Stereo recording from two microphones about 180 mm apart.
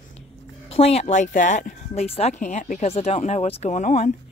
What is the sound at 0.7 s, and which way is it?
Speech, 35° left (ahead or behind).